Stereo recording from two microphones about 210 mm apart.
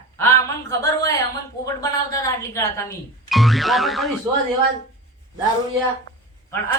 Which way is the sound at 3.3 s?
Centre (ahead or behind).